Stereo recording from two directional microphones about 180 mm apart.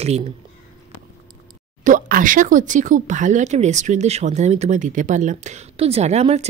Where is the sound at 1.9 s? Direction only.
50° right (ahead or behind).